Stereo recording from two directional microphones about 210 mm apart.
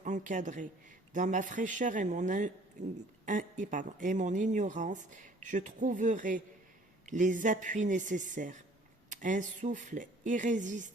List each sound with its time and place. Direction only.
0.0 s speech: 35° right (ahead or behind)